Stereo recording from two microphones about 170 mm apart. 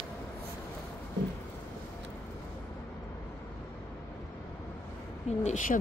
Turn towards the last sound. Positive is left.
turn(degrees=50)  # may be behind; listen again after turning